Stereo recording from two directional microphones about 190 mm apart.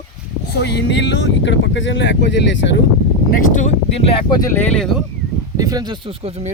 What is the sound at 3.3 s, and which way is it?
Speech, 45° left (ahead or behind).